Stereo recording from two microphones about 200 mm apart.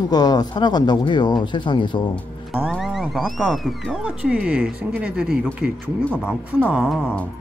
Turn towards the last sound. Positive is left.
turn(degrees=-5)  # may be behind; listen again after turning